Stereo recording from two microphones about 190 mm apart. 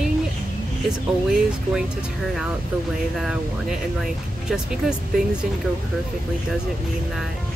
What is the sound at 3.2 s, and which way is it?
Speech, centre (ahead or behind).